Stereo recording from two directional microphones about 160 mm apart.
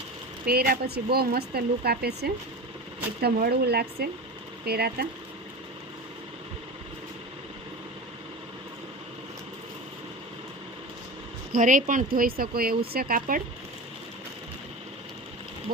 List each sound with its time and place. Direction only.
0.4 s speech: 75° right (ahead or behind)
3.2 s speech: 75° right (ahead or behind)
11.5 s speech: 55° right (ahead or behind)